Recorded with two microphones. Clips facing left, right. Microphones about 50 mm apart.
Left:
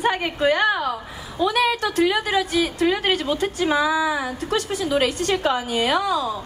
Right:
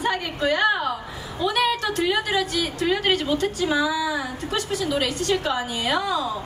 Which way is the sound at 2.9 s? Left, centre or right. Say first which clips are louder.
Even; centre.